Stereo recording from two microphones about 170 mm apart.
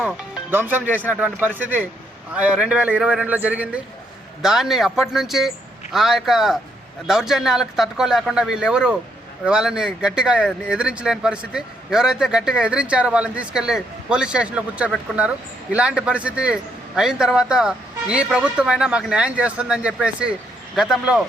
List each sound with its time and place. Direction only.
0.0 s a man's voice: 10° right (ahead or behind)